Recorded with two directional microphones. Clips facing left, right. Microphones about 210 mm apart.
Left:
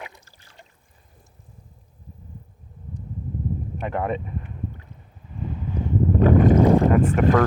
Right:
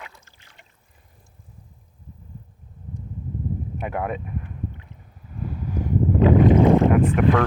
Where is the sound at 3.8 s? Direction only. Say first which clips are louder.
Left 2 dB; 10° right (ahead or behind).